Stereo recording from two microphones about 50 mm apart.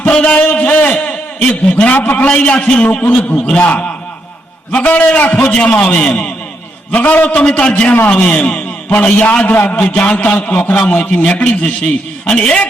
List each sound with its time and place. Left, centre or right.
0.0 s a man's voice: left
3.1 s a man's voice: left
3.3 s a man's voice: left
3.6 s a man's voice: left
7.4 s a man's voice: centre
7.7 s a man's voice: left
9.5 s a man's voice: left
9.9 s a man's voice: left